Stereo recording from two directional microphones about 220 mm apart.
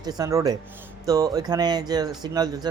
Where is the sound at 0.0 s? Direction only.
15° right (ahead or behind).